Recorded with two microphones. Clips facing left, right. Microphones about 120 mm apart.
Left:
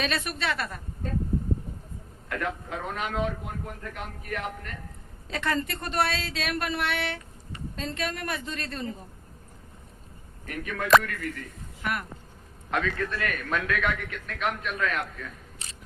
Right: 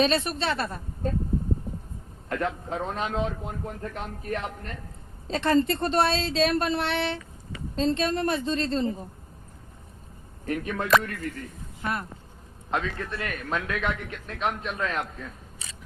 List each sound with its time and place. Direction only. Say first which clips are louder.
0.0 s a man's voice: right 6 dB; 30° right (ahead or behind)
2.3 s a man's voice: right 3 dB; 30° right (ahead or behind)
10.4 s speech: right 4 dB; 30° right (ahead or behind)